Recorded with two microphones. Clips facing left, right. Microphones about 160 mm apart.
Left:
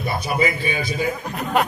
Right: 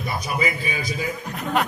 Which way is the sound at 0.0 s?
30° left (ahead or behind).